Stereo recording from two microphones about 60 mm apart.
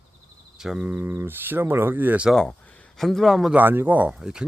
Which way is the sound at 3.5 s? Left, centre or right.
Right.